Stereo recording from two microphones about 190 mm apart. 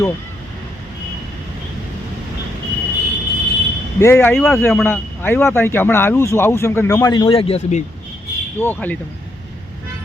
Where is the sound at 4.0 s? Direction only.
15° left (ahead or behind); by 7.8 s 30° left (ahead or behind).